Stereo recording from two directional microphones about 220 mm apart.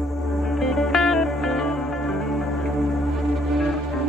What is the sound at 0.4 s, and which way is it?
Music, centre (ahead or behind).